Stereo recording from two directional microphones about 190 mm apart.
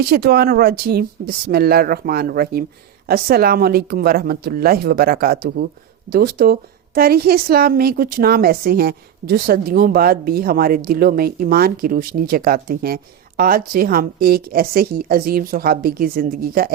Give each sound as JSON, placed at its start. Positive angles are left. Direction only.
{"t": 0.0, "sound": "a woman's voice", "side_deg": -55}